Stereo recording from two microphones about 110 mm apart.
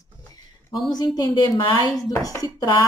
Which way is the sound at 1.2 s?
35° left (ahead or behind).